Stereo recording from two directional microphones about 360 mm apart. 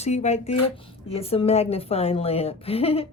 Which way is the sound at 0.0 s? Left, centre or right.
Centre.